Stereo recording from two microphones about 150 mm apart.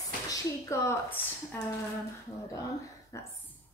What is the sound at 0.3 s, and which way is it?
Speech, 20° left (ahead or behind).